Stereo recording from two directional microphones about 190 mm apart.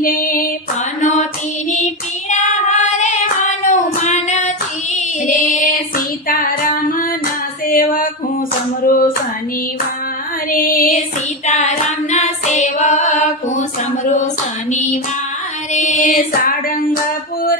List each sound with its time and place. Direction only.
0.0 s mantra: 45° left (ahead or behind)
3.6 s child singing: 35° left (ahead or behind)
4.9 s singing: 45° left (ahead or behind)
6.2 s female singing: 50° left (ahead or behind)
8.8 s hands: 45° left (ahead or behind)
10.5 s female singing: 45° left (ahead or behind)
11.4 s singing: 40° left (ahead or behind)
14.1 s a sound: 40° left (ahead or behind)
15.7 s female singing: 40° left (ahead or behind)